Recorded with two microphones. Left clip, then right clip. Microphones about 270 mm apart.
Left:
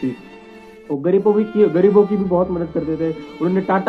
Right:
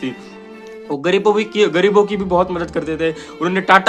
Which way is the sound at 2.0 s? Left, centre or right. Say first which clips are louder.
Right 1 dB; right.